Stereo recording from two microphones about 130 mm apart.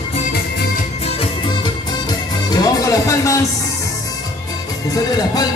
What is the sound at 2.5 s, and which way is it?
Music, 30° left (ahead or behind).